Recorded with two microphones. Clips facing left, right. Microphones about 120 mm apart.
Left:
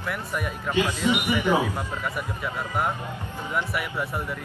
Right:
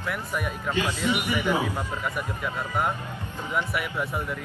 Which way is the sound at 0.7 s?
15° left (ahead or behind).